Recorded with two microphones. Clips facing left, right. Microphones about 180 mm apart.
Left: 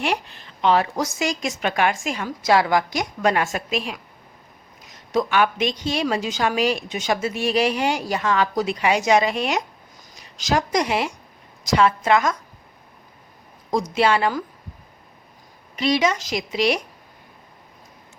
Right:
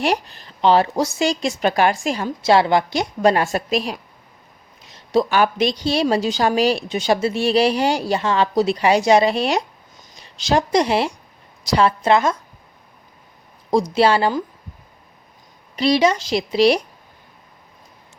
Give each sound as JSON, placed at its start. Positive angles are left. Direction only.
{"t": 0.0, "sound": "a woman's voice", "side_deg": -35}
{"t": 13.7, "sound": "a woman's voice", "side_deg": -35}
{"t": 15.7, "sound": "a woman's voice", "side_deg": -35}